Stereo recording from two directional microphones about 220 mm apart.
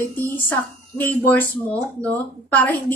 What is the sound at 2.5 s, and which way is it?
Speech, 10° left (ahead or behind).